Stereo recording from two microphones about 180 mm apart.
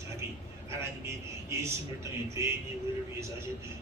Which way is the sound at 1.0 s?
15° right (ahead or behind).